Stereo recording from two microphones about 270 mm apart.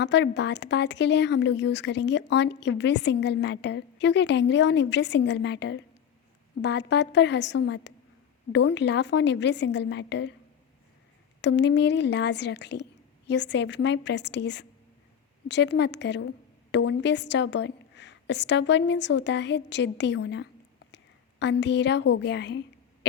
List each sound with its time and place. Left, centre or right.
0.0 s speech: left
11.3 s a woman's voice: left